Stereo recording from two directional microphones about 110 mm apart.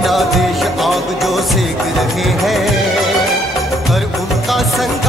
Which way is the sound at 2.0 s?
Centre (ahead or behind).